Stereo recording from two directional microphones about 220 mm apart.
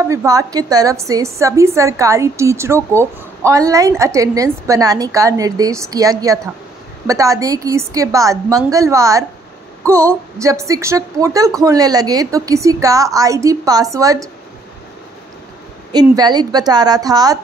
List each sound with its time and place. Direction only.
0.1 s a woman's voice: 15° right (ahead or behind)
15.9 s a woman's voice: 20° right (ahead or behind)